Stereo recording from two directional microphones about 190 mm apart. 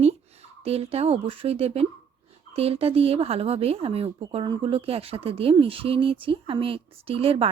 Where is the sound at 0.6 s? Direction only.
30° right (ahead or behind).